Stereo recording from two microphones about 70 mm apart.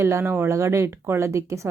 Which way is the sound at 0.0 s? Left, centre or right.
Right.